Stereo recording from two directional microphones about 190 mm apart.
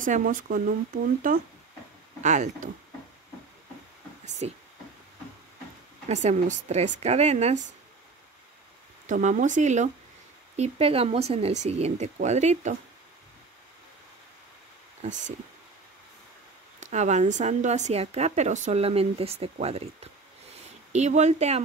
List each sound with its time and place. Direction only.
0.0 s speech: 45° right (ahead or behind)
4.4 s speech: 35° right (ahead or behind)
6.0 s speech: 40° right (ahead or behind)
9.0 s speech: 40° right (ahead or behind)
15.0 s speech: 40° right (ahead or behind)
16.8 s speech: 40° right (ahead or behind)